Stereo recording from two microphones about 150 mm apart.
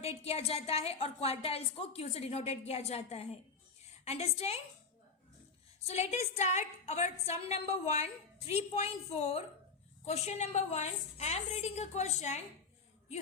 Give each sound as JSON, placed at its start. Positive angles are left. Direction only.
{"t": 0.0, "sound": "a woman's voice", "side_deg": 45}
{"t": 5.8, "sound": "a woman's voice", "side_deg": 45}